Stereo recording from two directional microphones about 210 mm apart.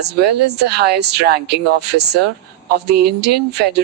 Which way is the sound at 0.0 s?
50° right (ahead or behind).